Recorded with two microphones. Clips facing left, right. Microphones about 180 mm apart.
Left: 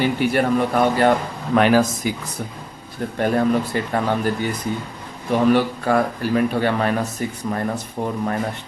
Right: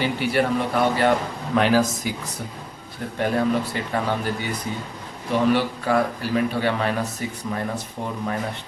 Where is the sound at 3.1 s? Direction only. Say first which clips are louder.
Left 3 dB; 50° left (ahead or behind).